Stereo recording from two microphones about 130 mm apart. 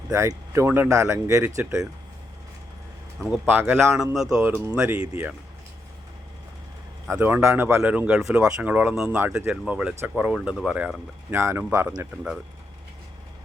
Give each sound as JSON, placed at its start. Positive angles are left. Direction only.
{"t": 0.1, "sound": "speech", "side_deg": -25}
{"t": 3.2, "sound": "speech", "side_deg": -10}
{"t": 3.9, "sound": "speech", "side_deg": -5}
{"t": 4.4, "sound": "speech", "side_deg": -15}
{"t": 7.1, "sound": "speech", "side_deg": -15}
{"t": 11.3, "sound": "speech", "side_deg": -20}
{"t": 12.1, "sound": "speech", "side_deg": -5}